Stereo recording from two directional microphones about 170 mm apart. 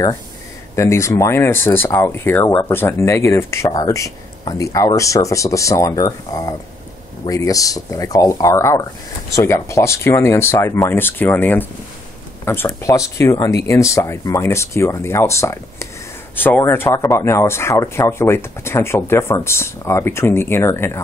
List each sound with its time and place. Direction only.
0.7 s speech: 15° left (ahead or behind)
12.6 s speech: 20° left (ahead or behind)